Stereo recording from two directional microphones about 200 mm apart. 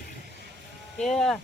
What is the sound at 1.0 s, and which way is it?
Speech, centre (ahead or behind).